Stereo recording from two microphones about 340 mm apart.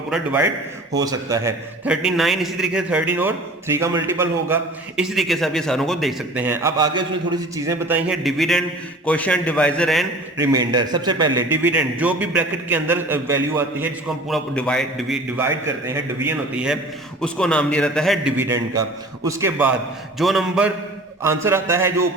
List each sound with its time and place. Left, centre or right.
0.1 s a man's voice: centre
10.4 s a man's voice: centre